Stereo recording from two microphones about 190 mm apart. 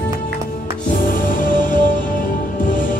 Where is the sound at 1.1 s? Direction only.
45° left (ahead or behind).